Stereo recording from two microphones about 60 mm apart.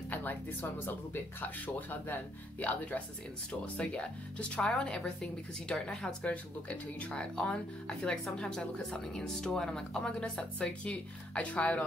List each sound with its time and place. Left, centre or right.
0.1 s speech: left